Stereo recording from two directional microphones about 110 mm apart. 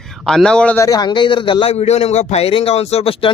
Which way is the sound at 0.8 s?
35° left (ahead or behind).